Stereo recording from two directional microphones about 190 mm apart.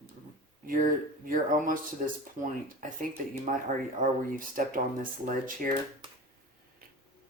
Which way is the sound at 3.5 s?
40° right (ahead or behind).